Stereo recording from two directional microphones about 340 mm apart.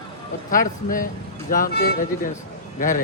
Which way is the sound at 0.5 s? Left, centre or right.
Left.